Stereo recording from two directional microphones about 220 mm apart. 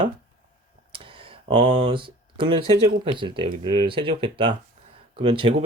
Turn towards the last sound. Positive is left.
turn(degrees=-20)  # may be behind; listen again after turning